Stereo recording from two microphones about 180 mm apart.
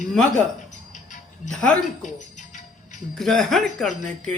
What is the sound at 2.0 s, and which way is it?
Music, 40° left (ahead or behind).